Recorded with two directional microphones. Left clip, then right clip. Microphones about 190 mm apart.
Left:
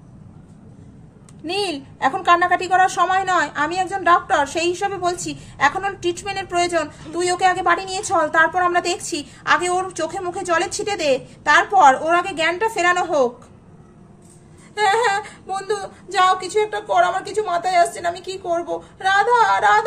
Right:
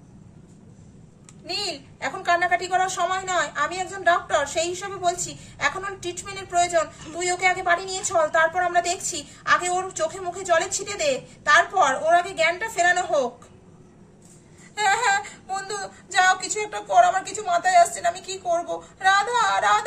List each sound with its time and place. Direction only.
1.4 s a woman's voice: 40° left (ahead or behind)
14.8 s female singing: 25° left (ahead or behind)